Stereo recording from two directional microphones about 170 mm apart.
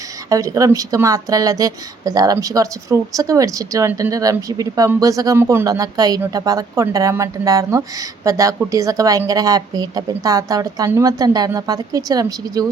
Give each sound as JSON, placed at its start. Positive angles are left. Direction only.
{"t": 0.3, "sound": "speech", "side_deg": -20}